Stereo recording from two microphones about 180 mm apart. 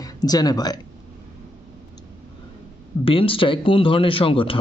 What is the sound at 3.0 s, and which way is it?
A man's voice, 30° left (ahead or behind).